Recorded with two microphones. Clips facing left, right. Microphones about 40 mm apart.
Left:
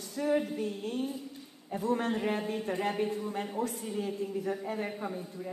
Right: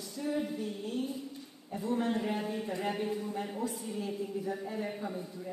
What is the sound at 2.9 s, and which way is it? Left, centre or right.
Speech, centre.